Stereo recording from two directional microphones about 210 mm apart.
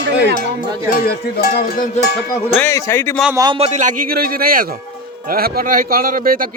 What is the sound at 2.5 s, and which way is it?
Speech, 10° left (ahead or behind).